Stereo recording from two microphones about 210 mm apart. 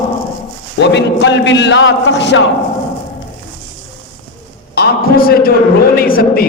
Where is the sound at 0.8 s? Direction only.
55° left (ahead or behind).